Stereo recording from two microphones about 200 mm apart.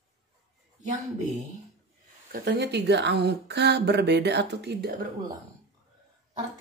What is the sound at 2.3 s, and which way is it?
Speech, 55° right (ahead or behind).